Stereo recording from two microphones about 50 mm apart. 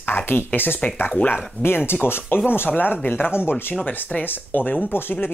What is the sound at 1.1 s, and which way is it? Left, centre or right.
Speech, left.